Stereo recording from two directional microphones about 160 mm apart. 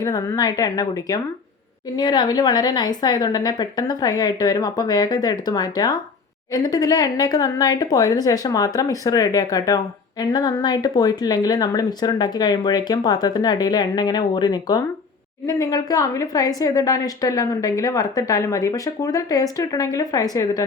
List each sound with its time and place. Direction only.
0.0 s speech: 25° left (ahead or behind)